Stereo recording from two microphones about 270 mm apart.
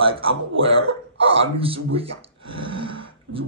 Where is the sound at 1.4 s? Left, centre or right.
Right.